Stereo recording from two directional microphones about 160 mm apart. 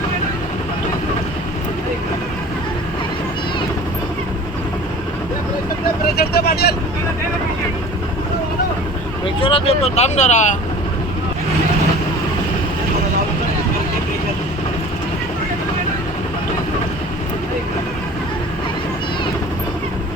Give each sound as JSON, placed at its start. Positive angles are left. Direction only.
{"t": 6.1, "sound": "vehicle", "side_deg": 85}
{"t": 9.2, "sound": "speech", "side_deg": 35}